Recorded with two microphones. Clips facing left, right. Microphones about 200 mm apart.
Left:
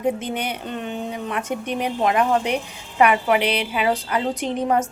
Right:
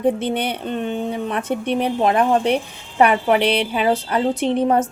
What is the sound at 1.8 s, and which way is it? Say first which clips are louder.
Speech: right 2 dB; 30° right (ahead or behind).